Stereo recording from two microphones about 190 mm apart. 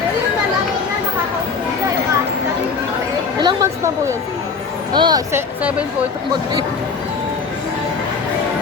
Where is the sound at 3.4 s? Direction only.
20° right (ahead or behind).